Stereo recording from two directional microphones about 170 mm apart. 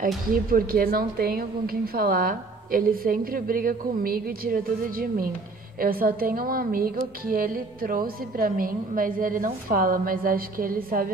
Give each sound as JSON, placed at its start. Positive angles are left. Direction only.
{"t": 0.0, "sound": "speech", "side_deg": -60}